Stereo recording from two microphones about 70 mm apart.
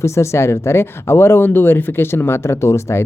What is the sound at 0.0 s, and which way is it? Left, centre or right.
Speech, left.